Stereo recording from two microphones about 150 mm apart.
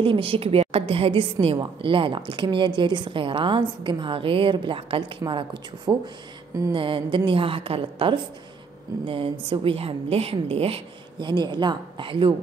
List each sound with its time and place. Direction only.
0.0 s a woman's voice: 35° right (ahead or behind)